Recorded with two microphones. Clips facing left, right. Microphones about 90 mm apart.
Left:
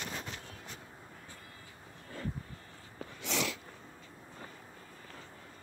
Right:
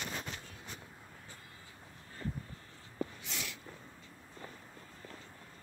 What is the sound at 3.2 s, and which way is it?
Sneeze, 90° left.